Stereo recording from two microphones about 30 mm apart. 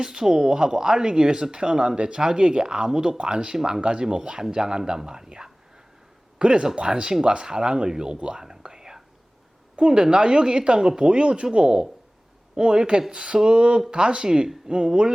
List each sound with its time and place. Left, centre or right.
0.0 s speech: right
0.3 s speech: centre; by 2.2 s right
2.2 s speech: right
6.4 s speech: right
8.4 s whispering: centre
9.7 s speech: right
12.5 s speech: right
13.1 s speech: right
14.3 s speech: right
14.7 s speech: right